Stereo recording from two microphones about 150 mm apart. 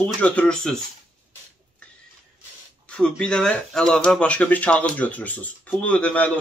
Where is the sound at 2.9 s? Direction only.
5° left (ahead or behind).